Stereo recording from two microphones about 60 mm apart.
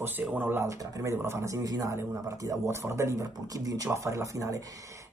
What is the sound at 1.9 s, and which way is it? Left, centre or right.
Speech, right.